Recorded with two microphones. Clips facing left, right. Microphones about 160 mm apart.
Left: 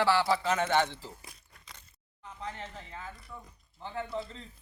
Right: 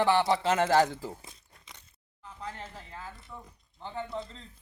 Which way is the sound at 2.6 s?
5° right (ahead or behind).